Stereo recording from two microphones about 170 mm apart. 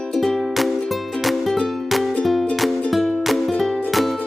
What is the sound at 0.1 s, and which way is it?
Music, centre (ahead or behind).